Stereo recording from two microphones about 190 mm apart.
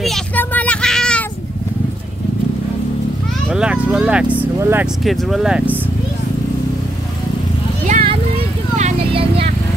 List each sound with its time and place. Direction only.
0.0 s child singing: 5° left (ahead or behind)
3.4 s speech: 5° right (ahead or behind)
5.0 s speech: centre (ahead or behind)
7.8 s vehicle: 35° right (ahead or behind)